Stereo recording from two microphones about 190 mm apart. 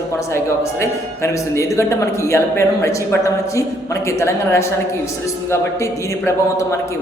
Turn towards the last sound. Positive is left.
turn(degrees=15)  # may be behind; listen again after turning